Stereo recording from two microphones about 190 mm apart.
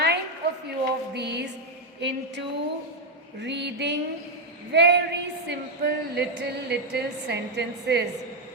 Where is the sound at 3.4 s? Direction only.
65° right (ahead or behind).